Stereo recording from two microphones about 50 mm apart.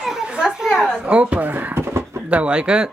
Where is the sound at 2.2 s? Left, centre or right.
Right.